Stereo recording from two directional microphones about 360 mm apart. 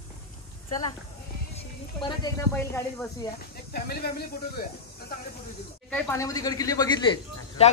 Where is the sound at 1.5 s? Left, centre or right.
Centre.